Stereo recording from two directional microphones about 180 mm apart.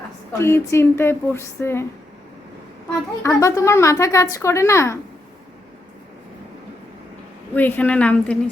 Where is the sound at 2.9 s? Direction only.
15° left (ahead or behind).